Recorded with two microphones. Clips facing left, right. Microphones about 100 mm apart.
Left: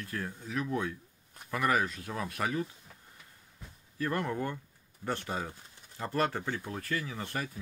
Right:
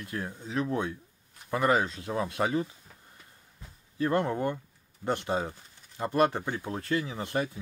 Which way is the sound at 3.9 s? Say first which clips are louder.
Right 5 dB; 25° right (ahead or behind).